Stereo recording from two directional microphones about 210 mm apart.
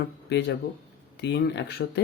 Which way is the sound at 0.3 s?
55° left (ahead or behind).